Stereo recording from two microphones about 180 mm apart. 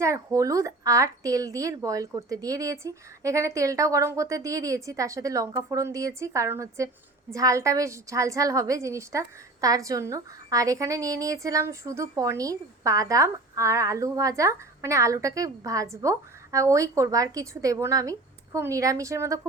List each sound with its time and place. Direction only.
0.0 s a woman's voice: 15° right (ahead or behind)